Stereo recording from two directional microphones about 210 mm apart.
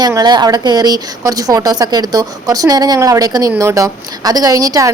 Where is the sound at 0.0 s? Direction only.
20° right (ahead or behind).